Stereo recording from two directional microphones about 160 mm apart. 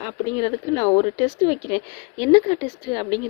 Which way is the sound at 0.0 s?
30° left (ahead or behind).